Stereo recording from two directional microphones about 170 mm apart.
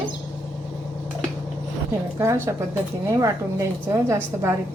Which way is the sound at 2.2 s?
15° right (ahead or behind).